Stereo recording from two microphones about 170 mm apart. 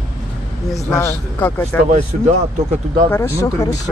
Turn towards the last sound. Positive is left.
turn(degrees=15)  # may be behind; listen again after turning